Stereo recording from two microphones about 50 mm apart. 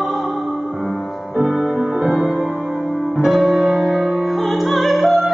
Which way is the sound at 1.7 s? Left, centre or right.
Centre.